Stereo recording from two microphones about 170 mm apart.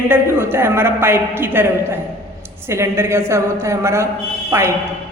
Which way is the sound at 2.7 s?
15° right (ahead or behind).